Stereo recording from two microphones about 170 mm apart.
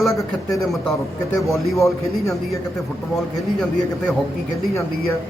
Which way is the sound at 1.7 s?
20° left (ahead or behind).